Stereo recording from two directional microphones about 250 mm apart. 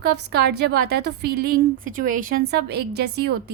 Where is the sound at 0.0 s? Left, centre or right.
Right.